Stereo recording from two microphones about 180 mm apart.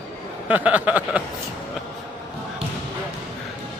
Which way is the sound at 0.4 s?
10° right (ahead or behind).